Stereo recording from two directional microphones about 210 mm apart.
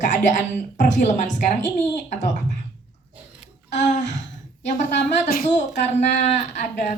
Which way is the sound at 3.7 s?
35° left (ahead or behind).